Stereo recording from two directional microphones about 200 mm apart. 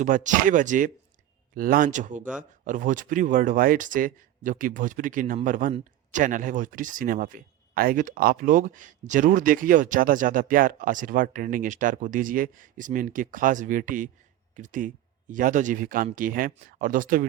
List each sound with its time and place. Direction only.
0.0 s speech: 40° right (ahead or behind)